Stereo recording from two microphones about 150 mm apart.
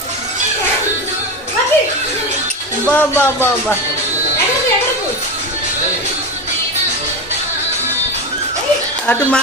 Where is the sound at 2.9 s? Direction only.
15° left (ahead or behind).